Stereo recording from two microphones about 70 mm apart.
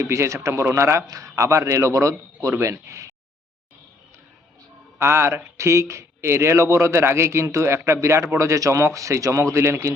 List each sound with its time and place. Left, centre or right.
0.0 s a man's voice: right
2.5 s a man's voice: right
4.9 s a man's voice: right